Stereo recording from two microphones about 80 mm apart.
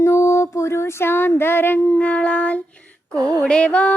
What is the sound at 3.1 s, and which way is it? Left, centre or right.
Music, right.